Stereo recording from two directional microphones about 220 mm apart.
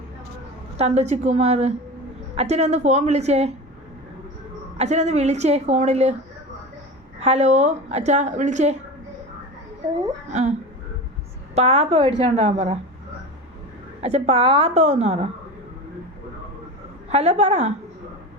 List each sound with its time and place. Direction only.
0.8 s a woman's voice: 30° right (ahead or behind)
4.8 s a woman's voice: 30° right (ahead or behind)
7.2 s a woman's voice: 30° right (ahead or behind)
11.5 s a woman's voice: 30° right (ahead or behind)
14.0 s a woman's voice: 30° right (ahead or behind)
17.1 s a woman's voice: 30° right (ahead or behind)